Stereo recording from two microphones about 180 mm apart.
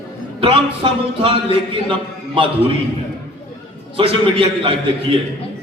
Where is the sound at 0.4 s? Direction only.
30° right (ahead or behind).